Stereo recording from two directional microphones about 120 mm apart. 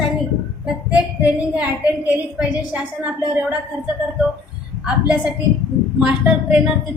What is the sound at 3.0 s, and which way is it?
Child singing, 15° right (ahead or behind).